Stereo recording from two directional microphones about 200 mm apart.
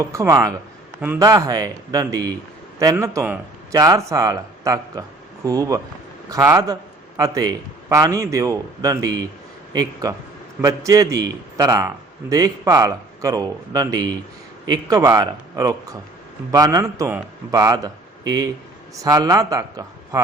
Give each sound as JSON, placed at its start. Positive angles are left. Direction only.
{"t": 0.0, "sound": "a man's voice", "side_deg": -15}